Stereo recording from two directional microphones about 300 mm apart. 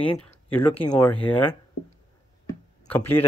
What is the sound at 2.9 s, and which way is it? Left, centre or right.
Speech, centre.